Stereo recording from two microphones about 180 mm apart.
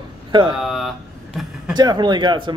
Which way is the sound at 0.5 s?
Centre (ahead or behind).